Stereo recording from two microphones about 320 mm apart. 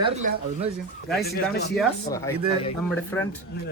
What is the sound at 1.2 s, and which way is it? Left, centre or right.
Speech, left.